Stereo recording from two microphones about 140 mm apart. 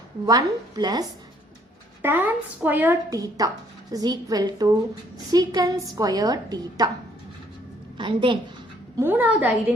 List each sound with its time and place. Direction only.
0.3 s a woman's voice: 30° right (ahead or behind)
2.0 s a woman's voice: 15° right (ahead or behind)
3.1 s a woman's voice: 25° right (ahead or behind)
7.9 s a woman's voice: 35° right (ahead or behind)
9.0 s a woman's voice: 15° right (ahead or behind)